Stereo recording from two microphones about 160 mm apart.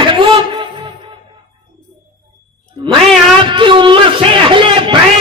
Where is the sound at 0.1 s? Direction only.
30° right (ahead or behind).